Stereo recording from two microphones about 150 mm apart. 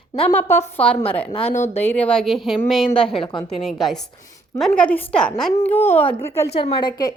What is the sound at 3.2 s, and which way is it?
Speech, 35° left (ahead or behind).